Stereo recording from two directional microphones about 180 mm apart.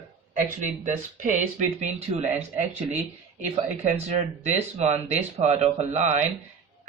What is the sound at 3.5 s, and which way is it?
Speech, 35° right (ahead or behind).